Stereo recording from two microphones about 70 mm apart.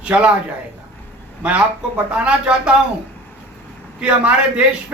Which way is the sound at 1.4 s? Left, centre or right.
Centre.